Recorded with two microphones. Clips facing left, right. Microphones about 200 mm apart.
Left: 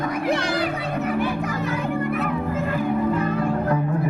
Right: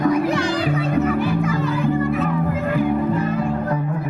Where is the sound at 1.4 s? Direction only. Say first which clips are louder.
Right 4 dB; 65° left (ahead or behind).